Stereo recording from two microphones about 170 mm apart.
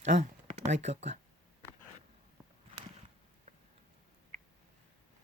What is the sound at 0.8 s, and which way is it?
Speech, 40° right (ahead or behind).